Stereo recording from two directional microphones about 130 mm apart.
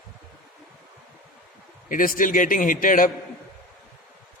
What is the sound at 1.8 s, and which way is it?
A man's voice, 90° left.